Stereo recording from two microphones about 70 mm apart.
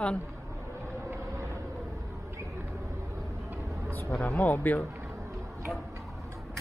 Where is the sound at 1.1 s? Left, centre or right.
Right.